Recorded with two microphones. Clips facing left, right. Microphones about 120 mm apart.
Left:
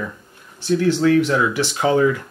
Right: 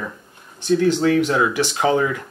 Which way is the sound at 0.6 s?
15° right (ahead or behind).